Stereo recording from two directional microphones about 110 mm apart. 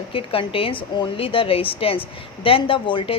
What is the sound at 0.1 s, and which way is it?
A woman's voice, 55° left (ahead or behind).